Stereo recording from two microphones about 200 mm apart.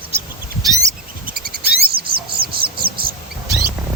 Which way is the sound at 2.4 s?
50° right (ahead or behind).